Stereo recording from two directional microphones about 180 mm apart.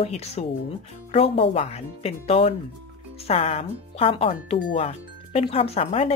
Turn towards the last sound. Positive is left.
turn(degrees=35)  # may be behind; listen again after turning